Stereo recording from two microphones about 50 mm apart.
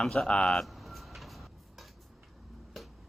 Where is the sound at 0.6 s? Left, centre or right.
Centre.